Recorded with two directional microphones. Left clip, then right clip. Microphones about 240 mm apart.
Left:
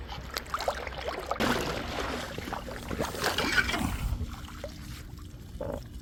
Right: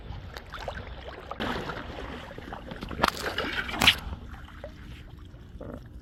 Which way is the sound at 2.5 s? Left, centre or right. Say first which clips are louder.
Left 3 dB; centre.